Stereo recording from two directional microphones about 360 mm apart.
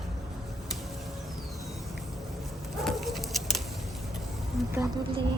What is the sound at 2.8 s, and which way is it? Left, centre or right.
Dog, centre.